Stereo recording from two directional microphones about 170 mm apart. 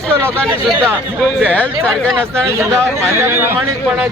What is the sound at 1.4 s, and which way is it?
Speech, 5° left (ahead or behind).